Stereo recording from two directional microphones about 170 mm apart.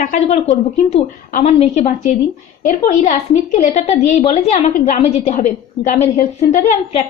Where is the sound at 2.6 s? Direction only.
50° left (ahead or behind).